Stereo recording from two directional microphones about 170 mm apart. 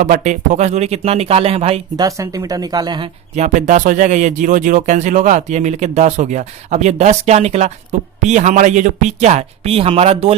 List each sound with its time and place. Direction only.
0.0 s speech: 50° right (ahead or behind)
2.0 s speech: 20° right (ahead or behind)
3.3 s speech: 45° right (ahead or behind)